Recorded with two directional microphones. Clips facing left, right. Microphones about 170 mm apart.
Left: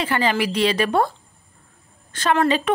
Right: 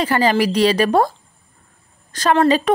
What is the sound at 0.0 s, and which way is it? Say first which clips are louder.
Speech: right 5 dB; 40° right (ahead or behind).